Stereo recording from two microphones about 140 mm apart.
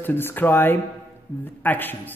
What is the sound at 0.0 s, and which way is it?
Speech, 15° left (ahead or behind).